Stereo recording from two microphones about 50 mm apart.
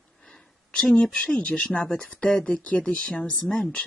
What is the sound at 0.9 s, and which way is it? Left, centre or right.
Speech, left.